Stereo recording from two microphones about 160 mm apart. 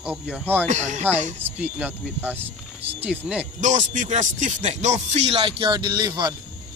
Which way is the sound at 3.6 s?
50° right (ahead or behind).